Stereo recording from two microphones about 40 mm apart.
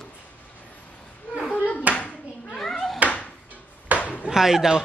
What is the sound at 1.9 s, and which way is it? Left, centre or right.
Clapping, right.